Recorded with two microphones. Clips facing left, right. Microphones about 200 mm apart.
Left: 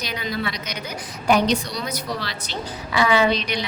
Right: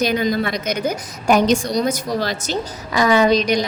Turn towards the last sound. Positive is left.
turn(degrees=-40)  # may be behind; listen again after turning